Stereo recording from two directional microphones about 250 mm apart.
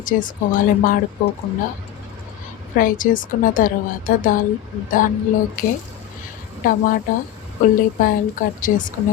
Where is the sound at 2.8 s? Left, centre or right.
Left.